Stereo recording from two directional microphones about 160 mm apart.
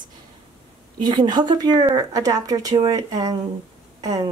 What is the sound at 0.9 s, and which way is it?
Speech, 25° right (ahead or behind).